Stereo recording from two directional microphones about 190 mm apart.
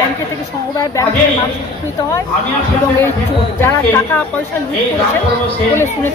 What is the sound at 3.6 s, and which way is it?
Speech, 10° left (ahead or behind).